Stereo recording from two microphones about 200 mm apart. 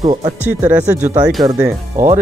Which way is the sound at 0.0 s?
20° right (ahead or behind).